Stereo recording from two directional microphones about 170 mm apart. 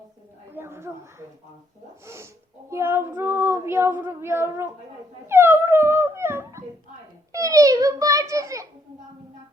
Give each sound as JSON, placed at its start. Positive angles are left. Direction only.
{"t": 0.5, "sound": "a sound", "side_deg": -15}
{"t": 2.0, "sound": "child singing", "side_deg": -15}
{"t": 5.3, "sound": "dog", "side_deg": -15}
{"t": 7.3, "sound": "a child's voice", "side_deg": -20}